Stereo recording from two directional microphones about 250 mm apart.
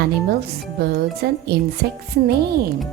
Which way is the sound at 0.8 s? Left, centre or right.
Right.